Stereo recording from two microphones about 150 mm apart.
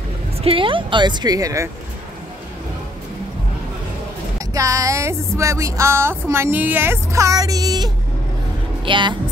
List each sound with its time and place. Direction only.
0.4 s a woman's voice: 35° right (ahead or behind)
4.6 s music: 20° right (ahead or behind)
8.8 s speech: 35° right (ahead or behind)